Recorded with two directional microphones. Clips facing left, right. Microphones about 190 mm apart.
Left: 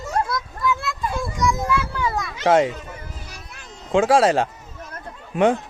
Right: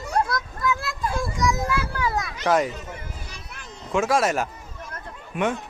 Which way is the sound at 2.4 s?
30° left (ahead or behind).